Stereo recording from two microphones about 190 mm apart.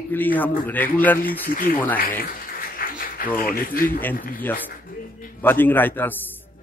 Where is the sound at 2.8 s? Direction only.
50° left (ahead or behind).